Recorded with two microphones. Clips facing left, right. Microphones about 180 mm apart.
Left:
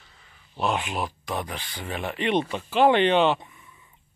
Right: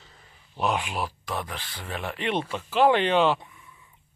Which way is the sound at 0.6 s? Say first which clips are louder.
Left 1 dB; 5° right (ahead or behind).